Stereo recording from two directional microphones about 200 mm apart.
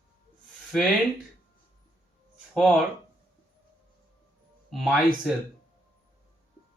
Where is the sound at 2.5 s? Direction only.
Centre (ahead or behind).